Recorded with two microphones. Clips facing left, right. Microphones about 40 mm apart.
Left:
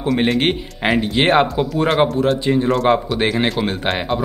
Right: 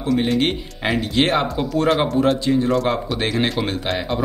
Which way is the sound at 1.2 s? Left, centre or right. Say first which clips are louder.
Left 5 dB; left.